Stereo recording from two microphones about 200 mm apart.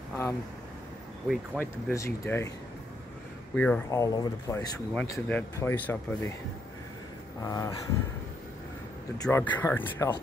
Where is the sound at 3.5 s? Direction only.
5° left (ahead or behind).